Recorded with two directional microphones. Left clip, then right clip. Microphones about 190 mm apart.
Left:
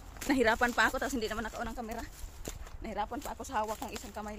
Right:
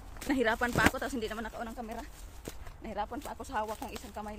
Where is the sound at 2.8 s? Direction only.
20° left (ahead or behind).